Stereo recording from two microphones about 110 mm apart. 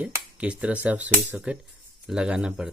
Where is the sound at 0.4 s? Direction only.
10° right (ahead or behind).